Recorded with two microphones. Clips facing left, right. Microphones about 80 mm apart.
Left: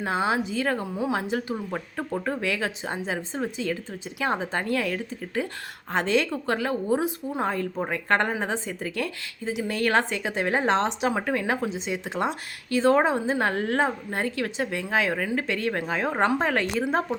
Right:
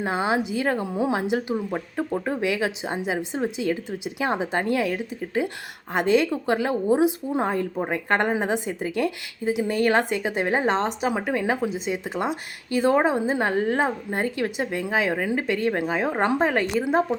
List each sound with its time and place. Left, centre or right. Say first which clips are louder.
0.0 s speech: right 1 dB; centre